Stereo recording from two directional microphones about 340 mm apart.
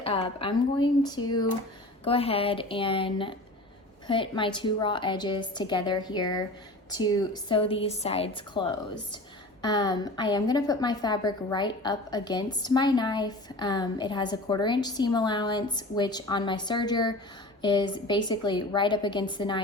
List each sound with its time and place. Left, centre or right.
0.0 s a woman's voice: centre